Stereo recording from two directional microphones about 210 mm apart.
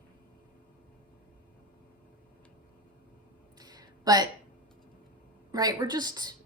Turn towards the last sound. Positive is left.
turn(degrees=-20)  # may be behind; listen again after turning